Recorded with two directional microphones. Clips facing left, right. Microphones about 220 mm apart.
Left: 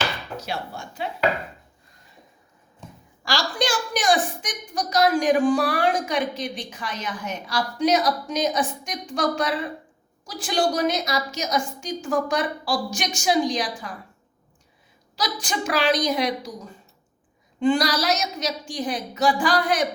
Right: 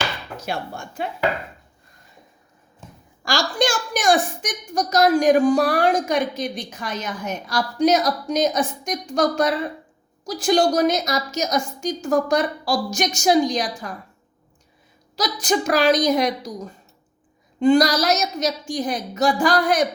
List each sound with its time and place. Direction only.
0.3 s a woman's voice: 50° right (ahead or behind)
3.2 s a woman's voice: 45° right (ahead or behind)
15.1 s a woman's voice: 40° right (ahead or behind)
17.6 s a woman's voice: 40° right (ahead or behind)